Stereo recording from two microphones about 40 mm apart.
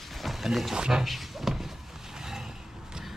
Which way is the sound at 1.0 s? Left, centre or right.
Centre.